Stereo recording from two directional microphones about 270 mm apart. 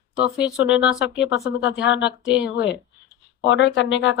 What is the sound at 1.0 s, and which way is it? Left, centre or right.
Speech, left.